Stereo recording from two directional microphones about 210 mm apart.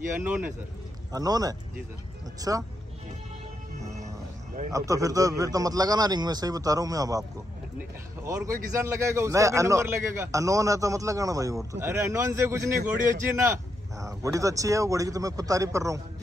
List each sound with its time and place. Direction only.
0.2 s a man's voice: 5° right (ahead or behind)
1.1 s a man's voice: 20° right (ahead or behind)
4.7 s a man's voice: 15° right (ahead or behind)